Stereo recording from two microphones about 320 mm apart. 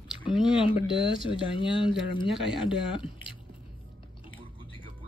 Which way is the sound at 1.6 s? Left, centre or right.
Centre.